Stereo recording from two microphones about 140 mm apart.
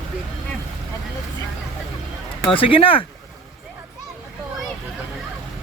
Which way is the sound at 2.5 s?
40° left (ahead or behind).